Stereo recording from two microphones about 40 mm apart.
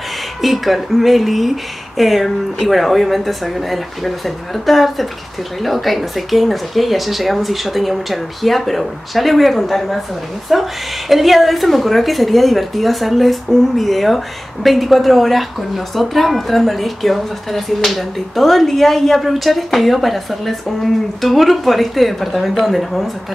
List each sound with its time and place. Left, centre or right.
0.4 s a woman's voice: centre